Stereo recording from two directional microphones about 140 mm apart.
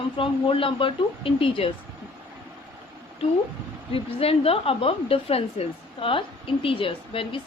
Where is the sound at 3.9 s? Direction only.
45° left (ahead or behind).